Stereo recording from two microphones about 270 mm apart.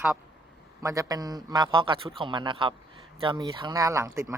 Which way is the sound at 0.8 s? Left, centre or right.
Centre.